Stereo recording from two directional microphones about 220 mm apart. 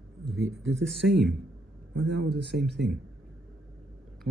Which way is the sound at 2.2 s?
50° right (ahead or behind).